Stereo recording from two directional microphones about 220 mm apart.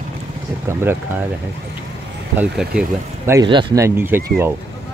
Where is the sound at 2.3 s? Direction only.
5° right (ahead or behind).